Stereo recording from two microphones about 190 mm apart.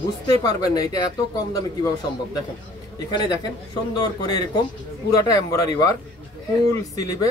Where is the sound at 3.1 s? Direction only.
20° left (ahead or behind).